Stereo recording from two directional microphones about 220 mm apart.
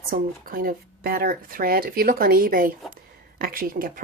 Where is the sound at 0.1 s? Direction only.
40° right (ahead or behind).